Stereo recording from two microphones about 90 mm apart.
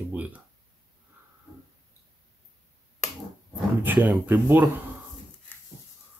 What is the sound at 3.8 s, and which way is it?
Speech, 20° right (ahead or behind).